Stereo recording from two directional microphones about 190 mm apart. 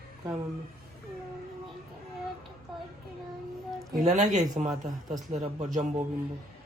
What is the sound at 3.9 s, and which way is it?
Speech, 40° right (ahead or behind).